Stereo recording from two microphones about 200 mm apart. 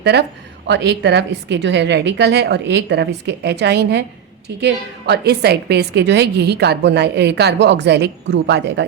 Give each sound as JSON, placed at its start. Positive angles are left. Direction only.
{"t": 0.0, "sound": "a woman's voice", "side_deg": -55}